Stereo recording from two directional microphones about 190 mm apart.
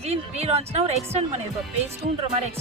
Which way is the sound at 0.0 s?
35° right (ahead or behind).